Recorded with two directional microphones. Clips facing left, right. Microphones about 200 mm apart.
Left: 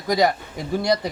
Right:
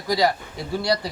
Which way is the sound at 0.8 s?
20° left (ahead or behind).